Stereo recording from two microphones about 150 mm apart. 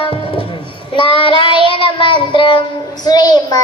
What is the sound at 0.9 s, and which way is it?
Child singing, 35° left (ahead or behind).